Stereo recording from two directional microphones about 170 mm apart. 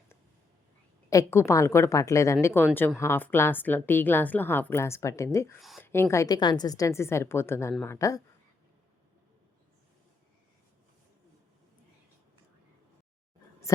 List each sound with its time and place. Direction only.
1.1 s a woman's voice: 15° left (ahead or behind)
5.5 s speech: centre (ahead or behind)
5.8 s a woman's voice: 15° left (ahead or behind)